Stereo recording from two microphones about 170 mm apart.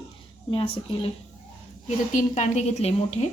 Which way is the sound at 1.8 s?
45° left (ahead or behind).